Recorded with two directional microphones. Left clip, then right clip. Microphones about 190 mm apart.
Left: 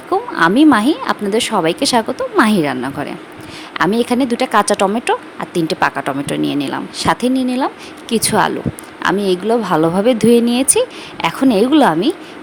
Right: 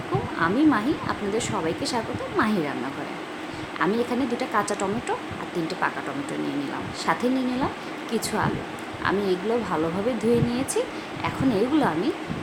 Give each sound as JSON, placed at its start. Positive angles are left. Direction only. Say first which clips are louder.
{"t": 0.3, "sound": "speech", "louder": "left 11 dB", "side_deg": 55}
{"t": 3.8, "sound": "speech", "louder": "left 10 dB", "side_deg": 50}